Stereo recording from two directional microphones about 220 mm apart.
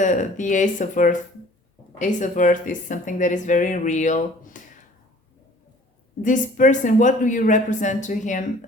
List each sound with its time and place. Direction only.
0.0 s speech: 35° left (ahead or behind)
6.2 s speech: 35° left (ahead or behind)